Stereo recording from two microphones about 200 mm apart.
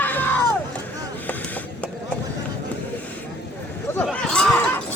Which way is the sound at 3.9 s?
5° left (ahead or behind).